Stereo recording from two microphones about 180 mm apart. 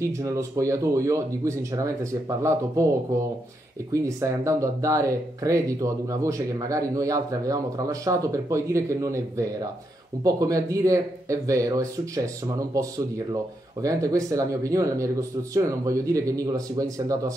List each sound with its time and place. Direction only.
0.0 s speech: 15° right (ahead or behind)
3.9 s speech: 15° right (ahead or behind)